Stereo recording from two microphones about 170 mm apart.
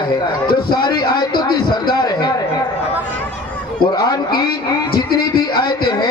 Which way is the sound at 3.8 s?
25° left (ahead or behind).